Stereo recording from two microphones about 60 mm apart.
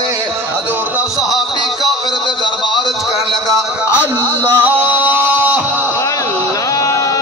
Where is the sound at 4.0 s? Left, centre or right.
Left.